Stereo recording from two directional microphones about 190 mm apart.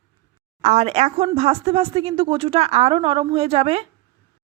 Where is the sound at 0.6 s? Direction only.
35° right (ahead or behind).